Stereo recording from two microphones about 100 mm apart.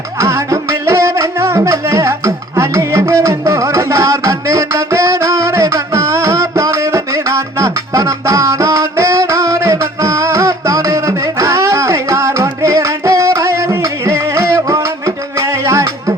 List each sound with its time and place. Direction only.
0.2 s music: 30° right (ahead or behind)